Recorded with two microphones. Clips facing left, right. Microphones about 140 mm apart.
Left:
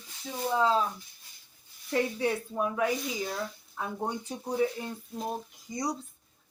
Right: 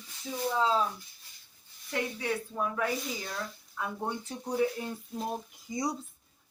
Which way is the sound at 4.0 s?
15° left (ahead or behind).